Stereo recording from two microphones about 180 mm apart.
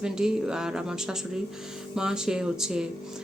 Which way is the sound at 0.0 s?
5° right (ahead or behind).